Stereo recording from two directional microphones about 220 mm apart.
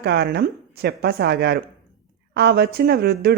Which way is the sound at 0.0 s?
45° right (ahead or behind).